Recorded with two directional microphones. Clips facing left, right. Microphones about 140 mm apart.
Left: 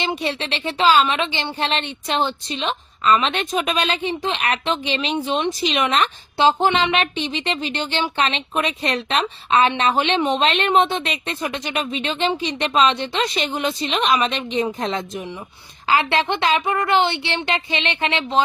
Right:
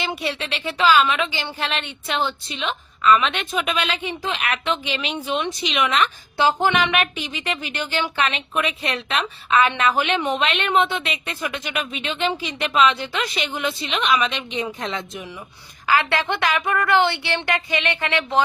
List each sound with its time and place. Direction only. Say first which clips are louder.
0.2 s a woman's voice: left 2 dB; 35° left (ahead or behind)
6.3 s speech: left 3 dB; 25° left (ahead or behind); by 15.0 s 45° left (ahead or behind)
15.9 s speech: left 2 dB; 20° left (ahead or behind)